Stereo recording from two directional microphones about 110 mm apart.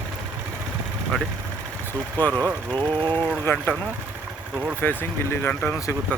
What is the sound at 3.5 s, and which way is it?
Speech, 25° left (ahead or behind).